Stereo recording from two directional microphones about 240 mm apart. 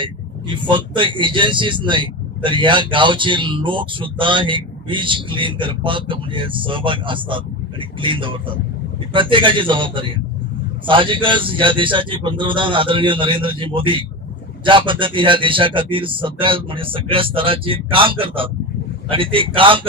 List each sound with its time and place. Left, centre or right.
0.0 s speech: centre